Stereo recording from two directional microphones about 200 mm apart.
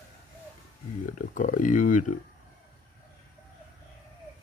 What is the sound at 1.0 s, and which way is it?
Speech, 40° left (ahead or behind).